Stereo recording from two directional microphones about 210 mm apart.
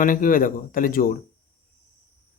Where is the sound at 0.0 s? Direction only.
40° left (ahead or behind).